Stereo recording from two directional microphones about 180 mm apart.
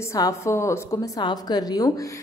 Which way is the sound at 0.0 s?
15° left (ahead or behind).